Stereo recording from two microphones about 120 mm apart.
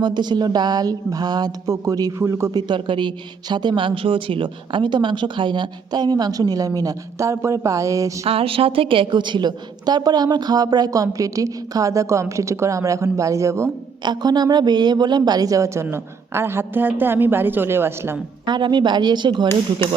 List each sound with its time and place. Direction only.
0.0 s a woman's voice: 40° right (ahead or behind)
2.5 s a woman's voice: 35° right (ahead or behind)
8.2 s a woman's voice: 50° right (ahead or behind); by 13.7 s 25° right (ahead or behind)
14.0 s speech: 35° right (ahead or behind); by 18.2 s 20° right (ahead or behind)
18.4 s a woman's voice: 40° right (ahead or behind)